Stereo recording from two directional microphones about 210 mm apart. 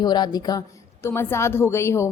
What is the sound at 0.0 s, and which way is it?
A woman's voice, 20° left (ahead or behind).